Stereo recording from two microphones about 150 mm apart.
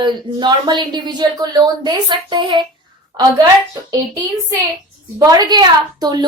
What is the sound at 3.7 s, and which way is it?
A woman's voice, 25° right (ahead or behind).